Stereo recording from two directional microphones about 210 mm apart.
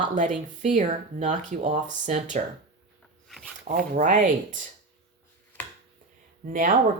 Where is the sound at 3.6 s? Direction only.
40° right (ahead or behind).